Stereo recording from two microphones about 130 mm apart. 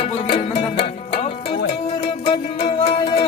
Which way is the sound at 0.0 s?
45° left (ahead or behind).